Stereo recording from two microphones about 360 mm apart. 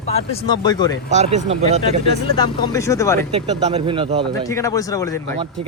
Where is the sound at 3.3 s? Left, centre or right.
Centre.